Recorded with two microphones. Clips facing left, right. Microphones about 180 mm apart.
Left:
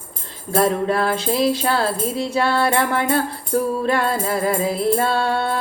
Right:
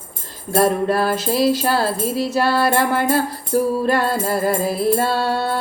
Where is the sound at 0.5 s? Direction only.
5° right (ahead or behind).